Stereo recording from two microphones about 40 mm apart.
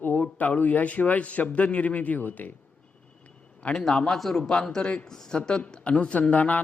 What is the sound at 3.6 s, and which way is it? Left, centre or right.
Speech, left.